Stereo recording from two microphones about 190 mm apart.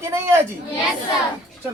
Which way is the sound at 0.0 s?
15° right (ahead or behind).